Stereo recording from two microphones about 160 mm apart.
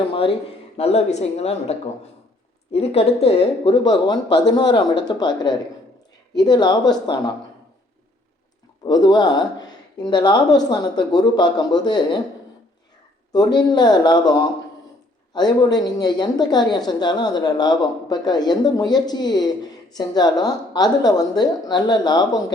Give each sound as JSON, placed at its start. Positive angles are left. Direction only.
{"t": 0.0, "sound": "speech", "side_deg": 35}
{"t": 2.7, "sound": "speech", "side_deg": 40}
{"t": 8.8, "sound": "speech", "side_deg": 25}
{"t": 13.3, "sound": "speech", "side_deg": 25}